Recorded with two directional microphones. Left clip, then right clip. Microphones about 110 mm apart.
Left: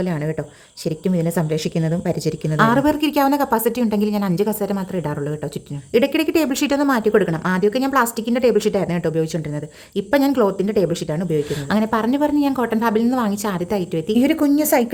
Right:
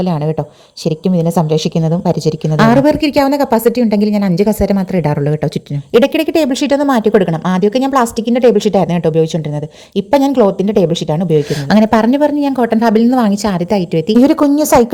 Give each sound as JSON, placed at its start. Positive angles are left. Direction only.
{"t": 0.0, "sound": "a woman's voice", "side_deg": -30}
{"t": 2.6, "sound": "speech", "side_deg": -40}
{"t": 6.0, "sound": "speech", "side_deg": -35}
{"t": 11.7, "sound": "a woman's voice", "side_deg": -60}